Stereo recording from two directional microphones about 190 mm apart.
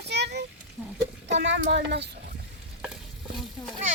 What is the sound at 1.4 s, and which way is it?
Speech, 70° right (ahead or behind).